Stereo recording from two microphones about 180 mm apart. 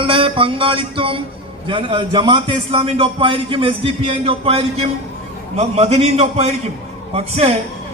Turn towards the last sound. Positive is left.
turn(degrees=-35)  # may be behind; listen again after turning